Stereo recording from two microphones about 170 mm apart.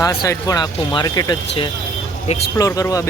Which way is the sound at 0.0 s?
20° left (ahead or behind).